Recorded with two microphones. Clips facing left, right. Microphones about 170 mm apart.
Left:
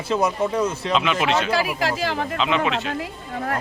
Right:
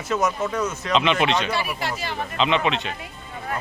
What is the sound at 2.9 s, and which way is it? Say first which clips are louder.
Speech: left 8 dB; 85° left.